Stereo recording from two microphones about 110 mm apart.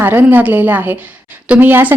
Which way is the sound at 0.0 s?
15° right (ahead or behind).